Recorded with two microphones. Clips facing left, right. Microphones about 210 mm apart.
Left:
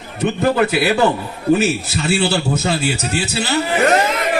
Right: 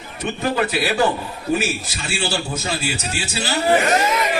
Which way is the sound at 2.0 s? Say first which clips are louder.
Left 7 dB; 60° left (ahead or behind).